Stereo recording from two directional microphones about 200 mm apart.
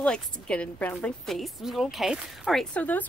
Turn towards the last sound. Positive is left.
turn(degrees=10)  # may be behind; listen again after turning